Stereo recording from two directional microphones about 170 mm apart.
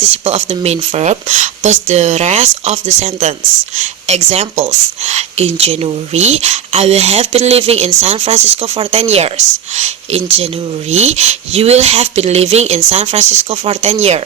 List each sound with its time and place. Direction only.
0.3 s speech: 40° right (ahead or behind)